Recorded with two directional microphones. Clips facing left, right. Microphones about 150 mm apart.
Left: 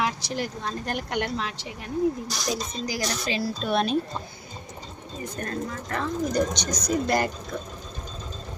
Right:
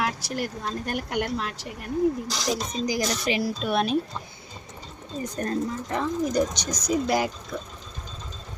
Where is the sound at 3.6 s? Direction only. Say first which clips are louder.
Left 1 dB; 5° right (ahead or behind).